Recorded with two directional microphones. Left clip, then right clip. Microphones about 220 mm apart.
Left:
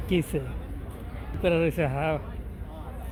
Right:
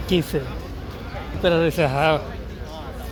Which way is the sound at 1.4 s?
10° left (ahead or behind).